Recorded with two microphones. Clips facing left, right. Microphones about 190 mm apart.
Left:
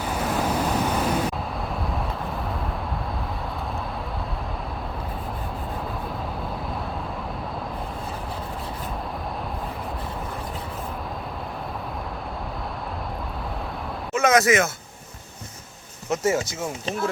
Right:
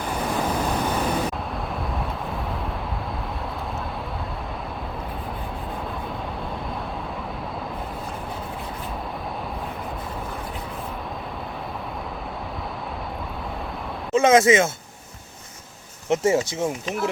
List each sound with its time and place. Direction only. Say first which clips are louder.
0.0 s waves: even; 5° left (ahead or behind)
14.1 s speech: right 3 dB; 25° right (ahead or behind)
16.0 s speech: right 3 dB; 25° right (ahead or behind)